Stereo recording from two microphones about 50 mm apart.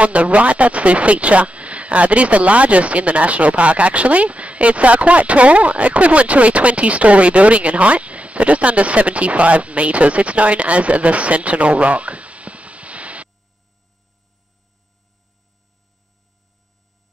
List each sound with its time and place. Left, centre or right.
0.0 s speech: right